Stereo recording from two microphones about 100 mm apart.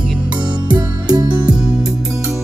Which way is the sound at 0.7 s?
45° right (ahead or behind).